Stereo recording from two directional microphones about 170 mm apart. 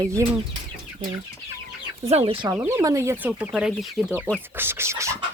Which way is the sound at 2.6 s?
15° right (ahead or behind).